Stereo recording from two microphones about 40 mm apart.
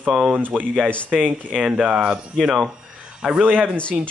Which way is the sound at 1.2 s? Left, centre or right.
Right.